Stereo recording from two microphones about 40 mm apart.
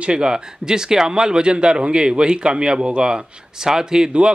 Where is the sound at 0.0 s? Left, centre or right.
Right.